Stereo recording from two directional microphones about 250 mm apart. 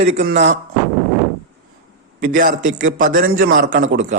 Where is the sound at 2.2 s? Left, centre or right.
Right.